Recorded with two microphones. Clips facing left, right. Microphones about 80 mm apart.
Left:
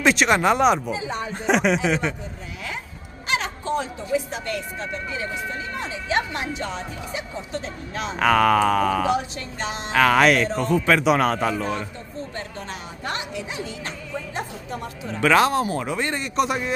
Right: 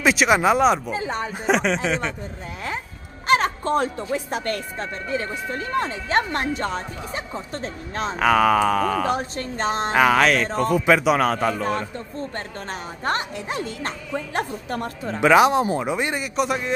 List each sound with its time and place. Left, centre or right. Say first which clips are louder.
0.0 s speech: right 1 dB; centre
0.9 s speech: right 2 dB; right
1.3 s speech: left 2 dB; centre
3.3 s speech: right 6 dB; right
8.2 s speech: even; centre
9.1 s a woman's voice: even; right
10.1 s speech: left 1 dB; centre
13.0 s speech: right 4 dB; right
15.1 s speech: right 3 dB; centre
16.3 s speech: left 1 dB; centre